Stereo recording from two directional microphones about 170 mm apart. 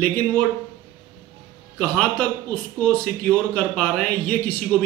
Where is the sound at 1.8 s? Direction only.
10° left (ahead or behind).